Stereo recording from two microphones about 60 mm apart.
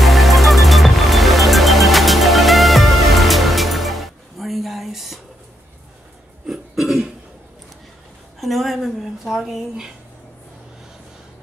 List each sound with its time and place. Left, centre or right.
0.0 s music: centre
6.4 s throat clearing: centre
8.4 s a sound: centre